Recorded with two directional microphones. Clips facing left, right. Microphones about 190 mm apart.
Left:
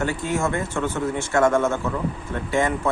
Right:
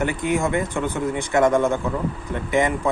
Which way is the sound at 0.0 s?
15° right (ahead or behind).